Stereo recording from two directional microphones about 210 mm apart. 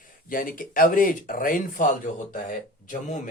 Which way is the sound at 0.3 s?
40° left (ahead or behind).